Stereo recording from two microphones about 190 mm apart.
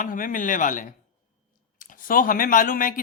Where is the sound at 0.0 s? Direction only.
45° left (ahead or behind).